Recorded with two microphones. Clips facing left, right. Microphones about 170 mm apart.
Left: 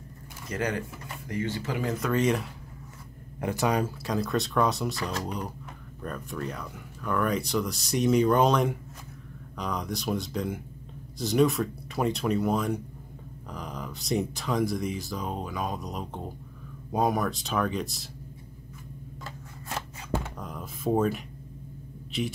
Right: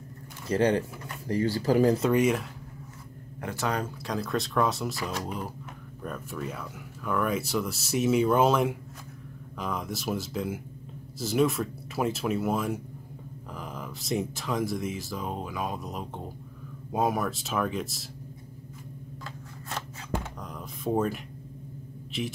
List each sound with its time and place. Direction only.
0.5 s speech: 30° right (ahead or behind)
2.0 s speech: 10° right (ahead or behind)
3.3 s speech: 15° left (ahead or behind); by 18.0 s centre (ahead or behind)
20.3 s a sound: centre (ahead or behind)
22.1 s speech: centre (ahead or behind)